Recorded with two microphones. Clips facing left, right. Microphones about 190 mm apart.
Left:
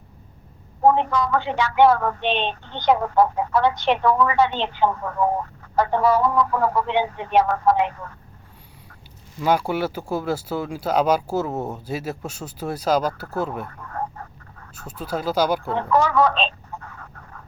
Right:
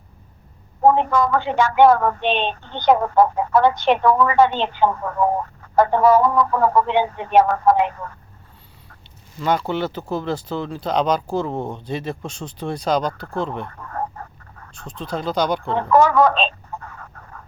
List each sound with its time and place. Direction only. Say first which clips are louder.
0.9 s speech: right 2 dB; 50° right (ahead or behind)
9.4 s speech: even; 10° left (ahead or behind)
14.8 s speech: even; 5° left (ahead or behind)
15.7 s speech: right 8 dB; 50° right (ahead or behind)